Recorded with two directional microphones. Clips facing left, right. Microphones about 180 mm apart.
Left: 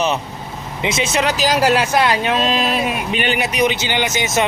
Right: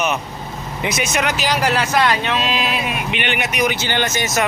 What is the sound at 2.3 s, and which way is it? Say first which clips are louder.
Speech: left 3 dB; 45° left (ahead or behind).